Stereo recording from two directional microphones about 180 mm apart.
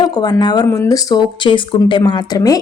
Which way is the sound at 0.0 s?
20° left (ahead or behind).